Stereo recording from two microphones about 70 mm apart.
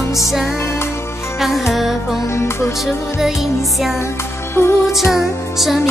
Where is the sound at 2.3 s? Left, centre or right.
Left.